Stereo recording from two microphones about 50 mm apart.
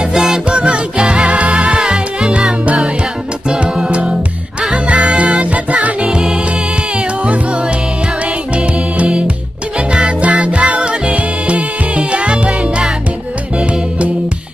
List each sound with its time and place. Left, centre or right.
0.3 s music: right
6.0 s music: centre
8.5 s music: right